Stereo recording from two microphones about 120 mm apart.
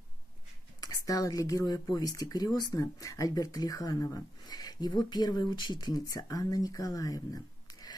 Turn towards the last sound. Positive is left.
turn(degrees=35)  # may be behind; listen again after turning